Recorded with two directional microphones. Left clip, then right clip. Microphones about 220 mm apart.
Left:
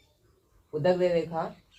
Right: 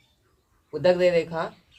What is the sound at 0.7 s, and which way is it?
Speech, 40° right (ahead or behind).